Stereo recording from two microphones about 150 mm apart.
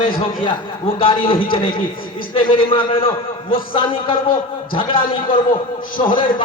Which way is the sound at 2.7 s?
35° left (ahead or behind).